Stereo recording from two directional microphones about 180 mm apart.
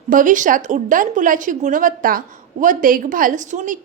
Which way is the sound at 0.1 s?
45° right (ahead or behind).